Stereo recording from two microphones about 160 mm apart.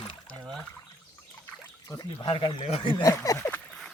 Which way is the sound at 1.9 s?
30° left (ahead or behind).